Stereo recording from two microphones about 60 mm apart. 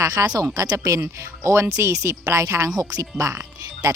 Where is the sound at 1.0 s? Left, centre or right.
Right.